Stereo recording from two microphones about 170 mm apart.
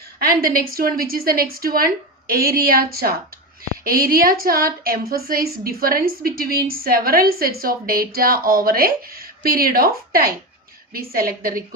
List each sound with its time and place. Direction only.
0.2 s a woman's voice: 60° right (ahead or behind)